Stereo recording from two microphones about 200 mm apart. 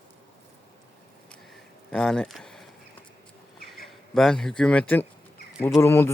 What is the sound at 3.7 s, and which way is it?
Speech, centre (ahead or behind).